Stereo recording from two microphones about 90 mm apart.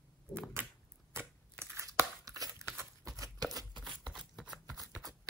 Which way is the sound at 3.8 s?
Centre (ahead or behind).